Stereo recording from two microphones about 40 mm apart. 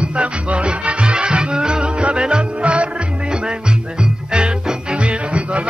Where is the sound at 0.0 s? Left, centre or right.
Right.